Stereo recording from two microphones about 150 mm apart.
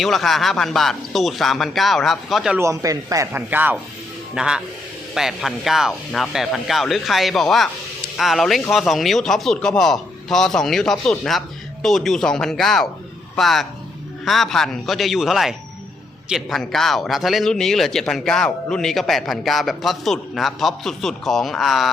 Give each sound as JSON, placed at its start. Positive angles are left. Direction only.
{"t": 0.0, "sound": "speech", "side_deg": 0}
{"t": 2.6, "sound": "speech", "side_deg": -20}